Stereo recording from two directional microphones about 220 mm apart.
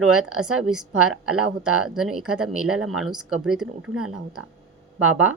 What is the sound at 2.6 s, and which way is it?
Speech, 75° right (ahead or behind).